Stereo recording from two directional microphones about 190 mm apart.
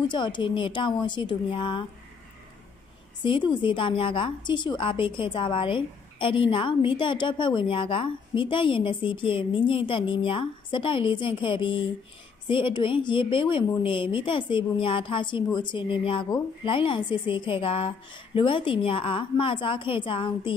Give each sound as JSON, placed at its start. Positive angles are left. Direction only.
{"t": 0.1, "sound": "a woman's voice", "side_deg": 25}
{"t": 3.2, "sound": "a woman's voice", "side_deg": 25}